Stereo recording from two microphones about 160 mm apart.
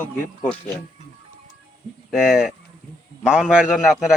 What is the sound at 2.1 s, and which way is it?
Speech, centre (ahead or behind).